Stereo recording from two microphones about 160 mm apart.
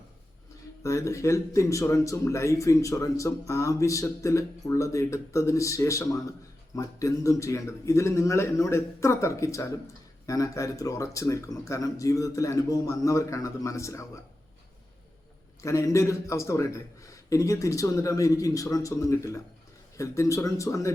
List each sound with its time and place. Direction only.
0.8 s speech: 20° left (ahead or behind)
15.6 s speech: 20° left (ahead or behind)